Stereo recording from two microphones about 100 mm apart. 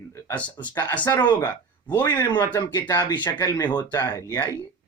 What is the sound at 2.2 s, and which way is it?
Speech, 50° left (ahead or behind).